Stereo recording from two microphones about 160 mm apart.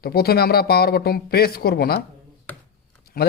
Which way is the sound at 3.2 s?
65° left (ahead or behind).